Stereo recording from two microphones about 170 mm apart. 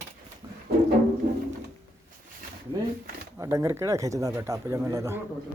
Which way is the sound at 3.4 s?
15° right (ahead or behind).